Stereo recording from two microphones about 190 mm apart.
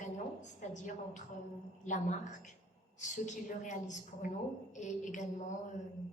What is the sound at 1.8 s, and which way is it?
A woman's voice, 40° left (ahead or behind).